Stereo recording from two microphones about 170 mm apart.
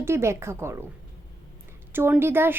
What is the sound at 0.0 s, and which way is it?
Speech, 15° right (ahead or behind).